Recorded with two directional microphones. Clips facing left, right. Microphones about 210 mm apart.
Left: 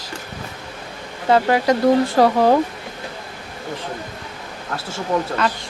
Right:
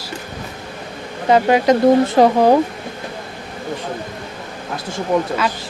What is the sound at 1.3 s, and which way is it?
Speech, 20° right (ahead or behind).